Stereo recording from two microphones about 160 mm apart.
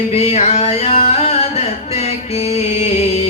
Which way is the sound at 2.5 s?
40° left (ahead or behind).